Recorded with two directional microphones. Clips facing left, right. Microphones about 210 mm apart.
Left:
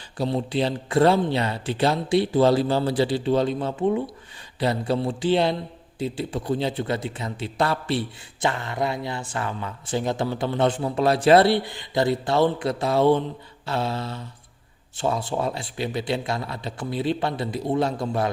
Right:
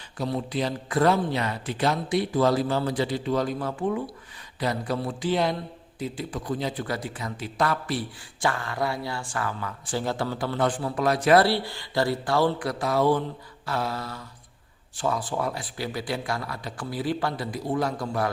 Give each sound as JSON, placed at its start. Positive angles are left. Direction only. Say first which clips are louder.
{"t": 0.2, "sound": "a man's voice", "louder": "left 4 dB", "side_deg": 30}